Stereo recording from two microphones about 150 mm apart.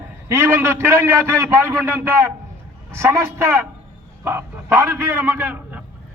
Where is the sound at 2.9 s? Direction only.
15° right (ahead or behind).